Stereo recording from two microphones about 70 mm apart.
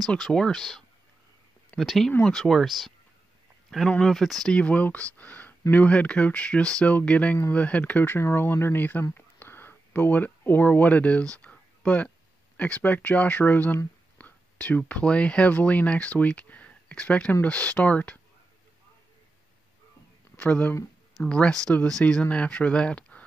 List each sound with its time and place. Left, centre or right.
0.1 s speech: centre
4.0 s speech: centre
4.6 s speech: centre
9.1 s a sound: left
12.5 s speech: centre
20.3 s speech: left